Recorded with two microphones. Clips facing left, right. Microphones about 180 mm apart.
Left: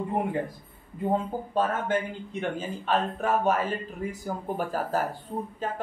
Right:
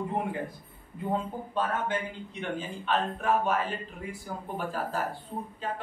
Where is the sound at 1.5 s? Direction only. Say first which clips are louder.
Left 4 dB; 45° left (ahead or behind).